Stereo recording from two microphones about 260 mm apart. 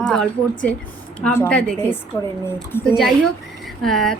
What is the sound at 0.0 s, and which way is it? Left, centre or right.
A woman's voice, centre.